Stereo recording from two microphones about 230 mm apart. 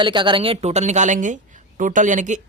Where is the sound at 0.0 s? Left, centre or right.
Right.